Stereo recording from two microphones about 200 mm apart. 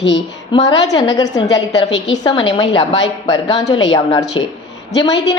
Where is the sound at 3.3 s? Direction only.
25° left (ahead or behind).